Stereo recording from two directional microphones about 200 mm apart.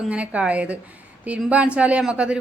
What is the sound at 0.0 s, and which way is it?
A woman's voice, 5° right (ahead or behind).